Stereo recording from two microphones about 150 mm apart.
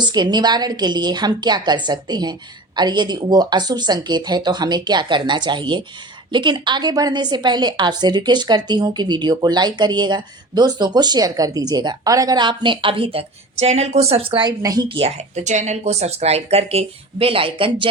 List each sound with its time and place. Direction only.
0.0 s a woman's voice: 30° right (ahead or behind)